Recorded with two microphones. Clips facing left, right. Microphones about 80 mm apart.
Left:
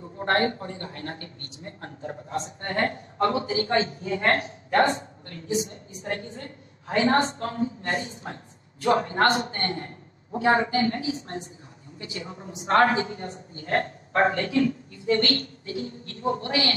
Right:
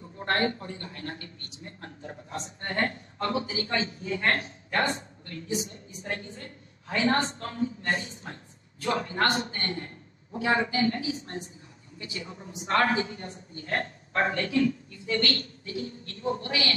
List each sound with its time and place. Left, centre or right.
0.2 s a woman's voice: left